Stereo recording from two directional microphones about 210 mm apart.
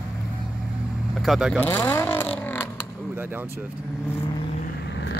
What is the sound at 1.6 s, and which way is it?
Vehicle, 10° left (ahead or behind).